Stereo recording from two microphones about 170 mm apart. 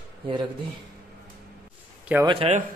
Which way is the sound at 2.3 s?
35° right (ahead or behind).